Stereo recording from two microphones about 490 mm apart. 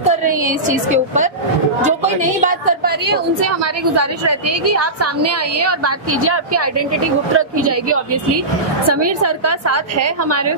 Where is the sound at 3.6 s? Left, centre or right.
Right.